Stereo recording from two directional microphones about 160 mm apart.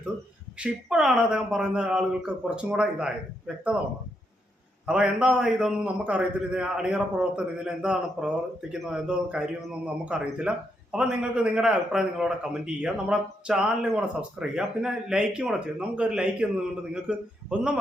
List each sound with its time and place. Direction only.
0.6 s a man's voice: 5° right (ahead or behind)
4.9 s a man's voice: 5° right (ahead or behind)